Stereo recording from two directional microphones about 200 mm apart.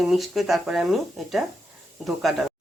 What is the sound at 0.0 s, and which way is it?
Speech, centre (ahead or behind).